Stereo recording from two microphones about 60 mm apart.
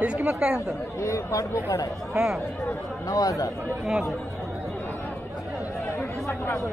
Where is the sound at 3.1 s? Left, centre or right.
Left.